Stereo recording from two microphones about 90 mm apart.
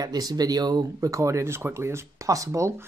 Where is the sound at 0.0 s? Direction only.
45° right (ahead or behind).